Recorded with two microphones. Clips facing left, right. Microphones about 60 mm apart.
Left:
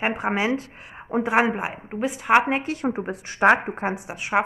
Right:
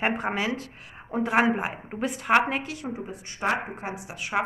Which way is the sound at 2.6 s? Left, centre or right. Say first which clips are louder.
Left 8 dB; left.